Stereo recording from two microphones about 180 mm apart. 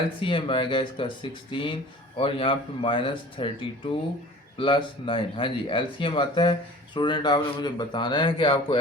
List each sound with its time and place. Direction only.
0.2 s speech: 30° left (ahead or behind)